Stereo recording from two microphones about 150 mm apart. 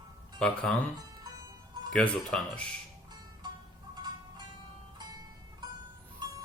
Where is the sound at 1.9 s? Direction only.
5° left (ahead or behind).